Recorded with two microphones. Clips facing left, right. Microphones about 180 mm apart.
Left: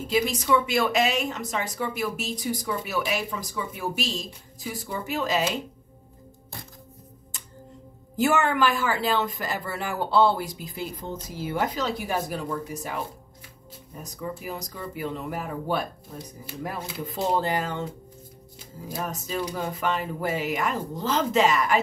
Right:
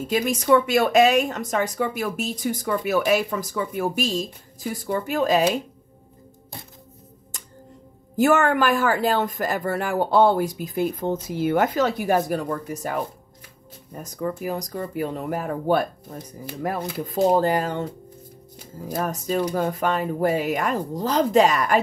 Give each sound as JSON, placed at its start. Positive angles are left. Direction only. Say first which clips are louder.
{"t": 0.0, "sound": "speech", "louder": "right 2 dB", "side_deg": -50}
{"t": 8.5, "sound": "speech", "louder": "right 4 dB", "side_deg": -45}
{"t": 14.2, "sound": "speech", "louder": "right 7 dB", "side_deg": -45}
{"t": 18.9, "sound": "speech", "louder": "right 6 dB", "side_deg": -45}